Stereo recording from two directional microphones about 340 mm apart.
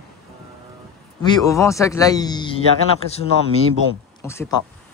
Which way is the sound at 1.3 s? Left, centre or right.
Centre.